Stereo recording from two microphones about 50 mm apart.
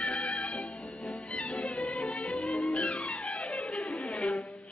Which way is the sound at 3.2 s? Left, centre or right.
Left.